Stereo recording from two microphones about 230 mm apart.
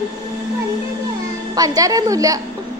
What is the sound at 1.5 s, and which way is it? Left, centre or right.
Speech, centre.